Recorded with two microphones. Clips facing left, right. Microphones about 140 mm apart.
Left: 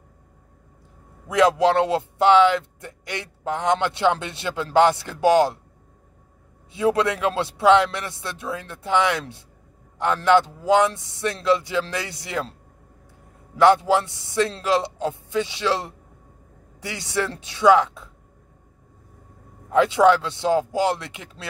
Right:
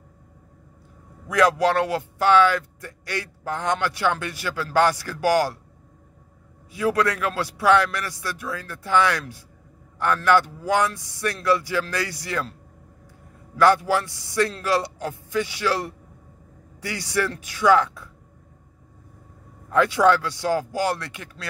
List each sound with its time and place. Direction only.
1.3 s speech: 20° left (ahead or behind)
6.7 s speech: 25° left (ahead or behind)
13.6 s speech: 20° left (ahead or behind)
19.7 s speech: 20° left (ahead or behind)